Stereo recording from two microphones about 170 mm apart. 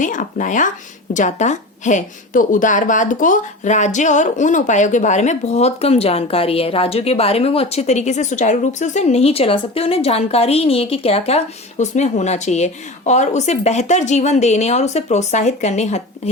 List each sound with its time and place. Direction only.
0.0 s a woman's voice: 50° left (ahead or behind)